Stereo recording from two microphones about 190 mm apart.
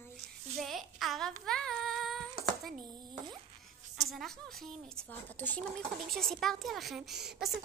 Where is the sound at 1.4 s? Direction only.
5° left (ahead or behind).